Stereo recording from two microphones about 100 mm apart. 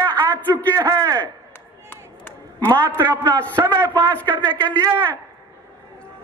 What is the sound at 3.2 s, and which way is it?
Speech, 15° left (ahead or behind).